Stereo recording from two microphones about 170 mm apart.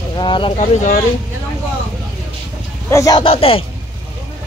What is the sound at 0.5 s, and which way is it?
Speech, 45° left (ahead or behind).